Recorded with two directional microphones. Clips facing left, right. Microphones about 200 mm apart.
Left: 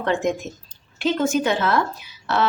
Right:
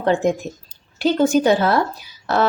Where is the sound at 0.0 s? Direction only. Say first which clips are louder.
Right 4 dB; 35° right (ahead or behind).